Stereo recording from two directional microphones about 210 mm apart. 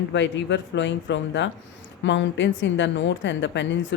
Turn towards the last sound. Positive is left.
turn(degrees=60)  # may be behind; listen again after turning